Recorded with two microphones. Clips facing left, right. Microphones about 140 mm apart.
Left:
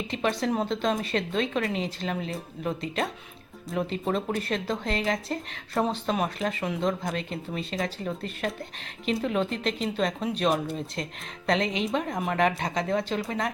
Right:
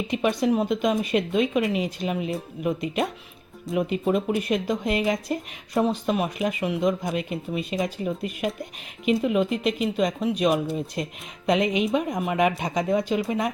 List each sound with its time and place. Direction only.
0.1 s speech: 15° right (ahead or behind)
12.1 s speech: centre (ahead or behind)
12.4 s speech: 15° right (ahead or behind)